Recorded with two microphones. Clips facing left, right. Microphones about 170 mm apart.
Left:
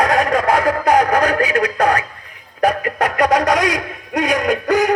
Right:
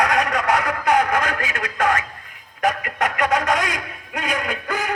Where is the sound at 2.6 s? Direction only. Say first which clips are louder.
Left 5 dB; 35° left (ahead or behind).